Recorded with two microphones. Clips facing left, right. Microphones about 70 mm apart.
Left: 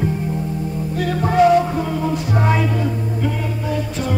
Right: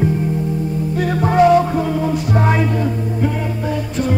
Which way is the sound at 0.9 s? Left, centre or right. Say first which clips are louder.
Right 1 dB; centre.